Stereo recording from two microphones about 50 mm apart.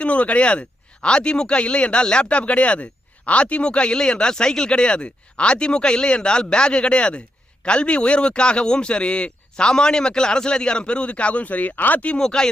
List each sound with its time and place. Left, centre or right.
0.0 s speech: left
12.0 s speech: centre